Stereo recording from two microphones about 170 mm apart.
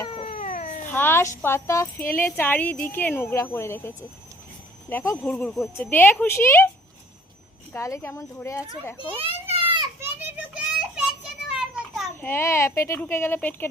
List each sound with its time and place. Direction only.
0.1 s cat: 35° left (ahead or behind)
0.4 s cat: 50° left (ahead or behind)
0.9 s speech: 10° left (ahead or behind)
7.7 s speech: 15° left (ahead or behind)
9.5 s children playing: 30° right (ahead or behind)
10.0 s children playing: 10° right (ahead or behind)
11.5 s a sound: 5° right (ahead or behind)
12.2 s speech: 15° left (ahead or behind)